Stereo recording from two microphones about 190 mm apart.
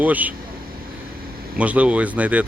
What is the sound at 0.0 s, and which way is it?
Speech, 10° right (ahead or behind).